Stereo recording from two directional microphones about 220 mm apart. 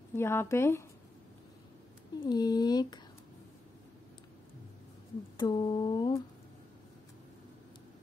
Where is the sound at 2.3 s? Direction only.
20° left (ahead or behind).